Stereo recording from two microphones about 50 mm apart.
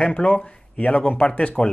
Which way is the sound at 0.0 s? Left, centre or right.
Left.